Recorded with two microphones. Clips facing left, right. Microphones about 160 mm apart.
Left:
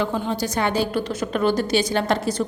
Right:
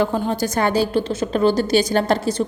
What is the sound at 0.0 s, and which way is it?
Speech, 45° right (ahead or behind).